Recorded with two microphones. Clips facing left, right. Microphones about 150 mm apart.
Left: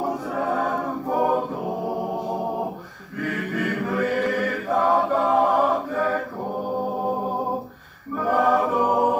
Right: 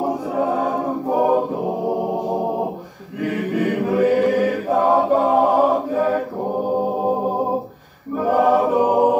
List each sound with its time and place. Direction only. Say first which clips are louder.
0.0 s choir: right 4 dB; 20° right (ahead or behind)
3.3 s choir: right 6 dB; 25° right (ahead or behind)
8.3 s choir: right 4 dB; 30° right (ahead or behind)
8.7 s chant: right 5 dB; 20° right (ahead or behind)